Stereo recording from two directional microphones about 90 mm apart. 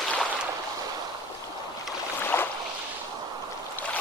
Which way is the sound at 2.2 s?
25° left (ahead or behind).